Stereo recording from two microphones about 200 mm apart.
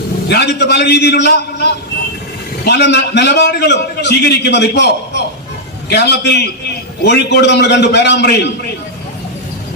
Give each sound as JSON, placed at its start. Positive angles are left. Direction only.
{"t": 0.3, "sound": "a man's voice", "side_deg": 55}